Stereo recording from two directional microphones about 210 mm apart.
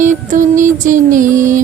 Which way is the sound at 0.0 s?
35° right (ahead or behind).